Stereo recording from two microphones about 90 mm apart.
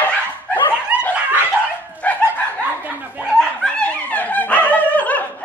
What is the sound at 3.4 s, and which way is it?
Dog, 10° left (ahead or behind).